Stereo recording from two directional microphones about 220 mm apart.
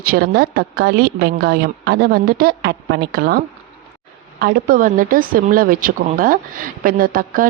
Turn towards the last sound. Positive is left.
turn(degrees=-40)  # may be behind; listen again after turning